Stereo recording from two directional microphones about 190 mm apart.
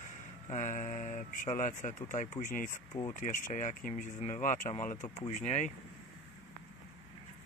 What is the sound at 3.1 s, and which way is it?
Speech, 40° left (ahead or behind).